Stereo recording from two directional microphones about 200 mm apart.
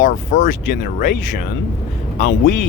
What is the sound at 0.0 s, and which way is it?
Speech, 40° left (ahead or behind).